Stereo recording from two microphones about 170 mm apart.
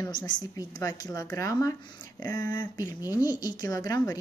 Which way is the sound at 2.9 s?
10° right (ahead or behind).